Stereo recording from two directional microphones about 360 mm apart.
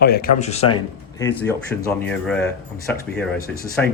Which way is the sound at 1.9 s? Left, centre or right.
Centre.